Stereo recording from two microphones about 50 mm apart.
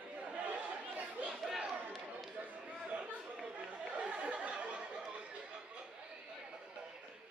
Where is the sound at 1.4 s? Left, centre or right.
Centre.